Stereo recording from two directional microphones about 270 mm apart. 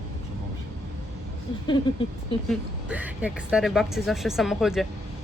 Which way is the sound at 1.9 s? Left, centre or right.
Centre.